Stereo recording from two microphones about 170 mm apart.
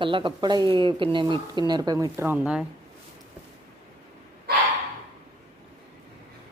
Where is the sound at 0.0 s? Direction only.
30° right (ahead or behind); by 2.6 s 5° right (ahead or behind).